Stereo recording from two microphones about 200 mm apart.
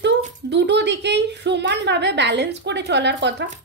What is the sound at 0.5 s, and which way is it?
Speech, 60° right (ahead or behind).